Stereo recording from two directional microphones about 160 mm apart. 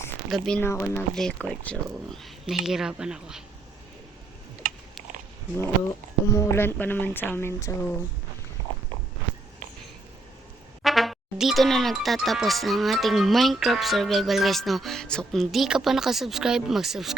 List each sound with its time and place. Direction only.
0.3 s speech: centre (ahead or behind)
0.6 s speech: 15° left (ahead or behind); by 3.4 s 5° right (ahead or behind)
4.6 s a sound: 65° right (ahead or behind)
6.3 s speech: 15° left (ahead or behind)
10.8 s speech: centre (ahead or behind)